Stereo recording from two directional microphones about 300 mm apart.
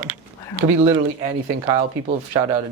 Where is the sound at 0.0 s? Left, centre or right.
Centre.